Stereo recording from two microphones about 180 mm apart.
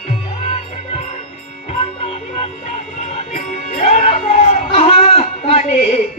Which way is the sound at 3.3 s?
40° left (ahead or behind).